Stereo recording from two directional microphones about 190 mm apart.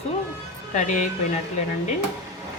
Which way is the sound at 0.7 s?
40° left (ahead or behind).